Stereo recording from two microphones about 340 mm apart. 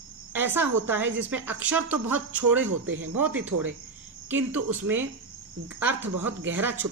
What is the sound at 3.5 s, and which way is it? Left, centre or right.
Speech, right.